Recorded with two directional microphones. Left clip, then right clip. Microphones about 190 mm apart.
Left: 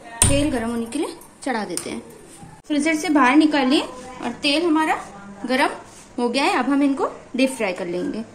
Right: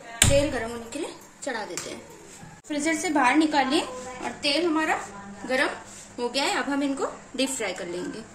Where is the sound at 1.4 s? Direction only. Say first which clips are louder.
Left 6 dB; 50° left (ahead or behind).